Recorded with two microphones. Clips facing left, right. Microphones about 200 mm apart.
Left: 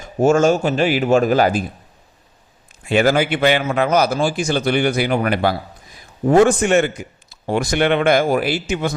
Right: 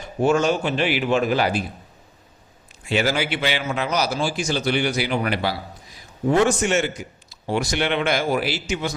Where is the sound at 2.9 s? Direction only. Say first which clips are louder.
Left 6 dB; 50° left (ahead or behind).